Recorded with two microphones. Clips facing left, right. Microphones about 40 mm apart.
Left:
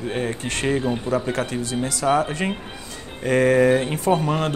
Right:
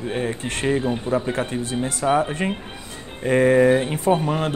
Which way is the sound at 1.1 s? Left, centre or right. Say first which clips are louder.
Even; right.